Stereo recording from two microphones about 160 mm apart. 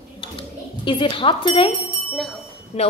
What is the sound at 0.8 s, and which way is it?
Speech, 30° left (ahead or behind).